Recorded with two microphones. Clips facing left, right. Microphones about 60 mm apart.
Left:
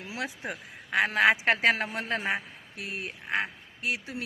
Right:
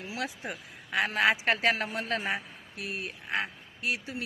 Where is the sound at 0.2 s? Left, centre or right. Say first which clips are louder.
Left 2 dB; left.